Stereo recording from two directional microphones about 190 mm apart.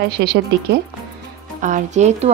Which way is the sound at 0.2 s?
60° right (ahead or behind).